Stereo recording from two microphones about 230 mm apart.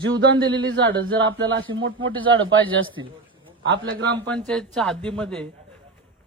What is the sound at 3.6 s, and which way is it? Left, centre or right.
Speech, right.